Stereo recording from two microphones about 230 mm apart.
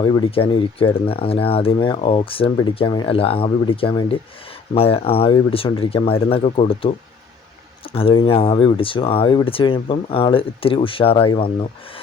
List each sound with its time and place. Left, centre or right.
0.0 s speech: centre